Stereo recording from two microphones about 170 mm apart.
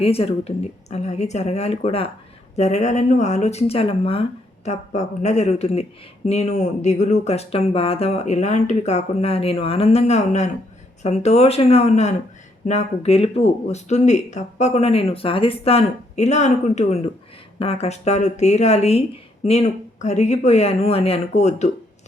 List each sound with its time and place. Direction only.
0.0 s speech: 35° left (ahead or behind)